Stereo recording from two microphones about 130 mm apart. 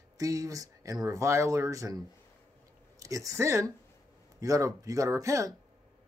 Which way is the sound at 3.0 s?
25° right (ahead or behind).